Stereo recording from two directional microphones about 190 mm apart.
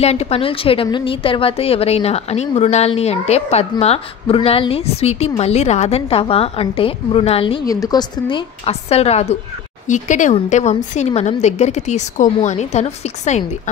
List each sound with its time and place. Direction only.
0.0 s a woman's voice: 35° left (ahead or behind)
8.6 s a woman's voice: 35° left (ahead or behind)